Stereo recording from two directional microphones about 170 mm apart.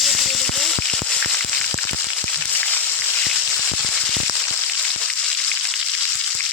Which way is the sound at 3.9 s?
5° left (ahead or behind).